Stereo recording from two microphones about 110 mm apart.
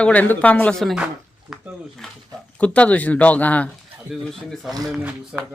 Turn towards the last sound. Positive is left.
turn(degrees=-10)  # may be behind; listen again after turning